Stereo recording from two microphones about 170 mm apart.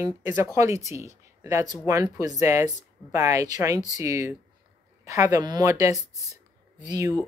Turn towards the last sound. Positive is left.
turn(degrees=-20)  # may be behind; listen again after turning